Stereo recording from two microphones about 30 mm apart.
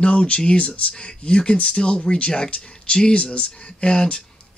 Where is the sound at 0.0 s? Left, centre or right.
Left.